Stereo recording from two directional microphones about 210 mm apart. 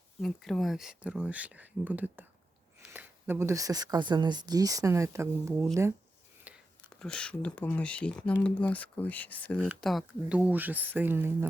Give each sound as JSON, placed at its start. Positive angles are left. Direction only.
{"t": 0.2, "sound": "speech", "side_deg": 0}
{"t": 6.5, "sound": "a sound", "side_deg": -5}
{"t": 6.9, "sound": "speech", "side_deg": 5}